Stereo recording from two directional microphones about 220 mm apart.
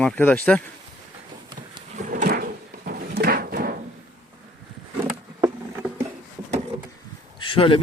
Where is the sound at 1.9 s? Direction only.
35° right (ahead or behind).